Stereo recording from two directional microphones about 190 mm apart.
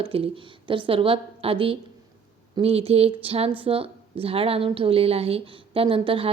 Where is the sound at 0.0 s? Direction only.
30° right (ahead or behind).